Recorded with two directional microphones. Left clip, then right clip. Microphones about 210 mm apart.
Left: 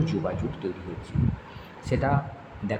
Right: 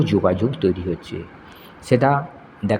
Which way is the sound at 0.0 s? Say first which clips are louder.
Right 11 dB; 35° right (ahead or behind).